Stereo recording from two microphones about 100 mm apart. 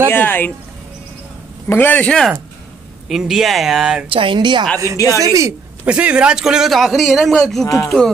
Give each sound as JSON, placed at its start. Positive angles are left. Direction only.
{"t": 0.1, "sound": "speech", "side_deg": 20}
{"t": 1.8, "sound": "speech", "side_deg": 15}
{"t": 3.1, "sound": "a man's voice", "side_deg": -5}
{"t": 4.1, "sound": "a woman's voice", "side_deg": -60}
{"t": 4.9, "sound": "speech", "side_deg": 35}
{"t": 5.2, "sound": "speech", "side_deg": -35}
{"t": 5.9, "sound": "a man's voice", "side_deg": -10}
{"t": 7.6, "sound": "speech", "side_deg": 35}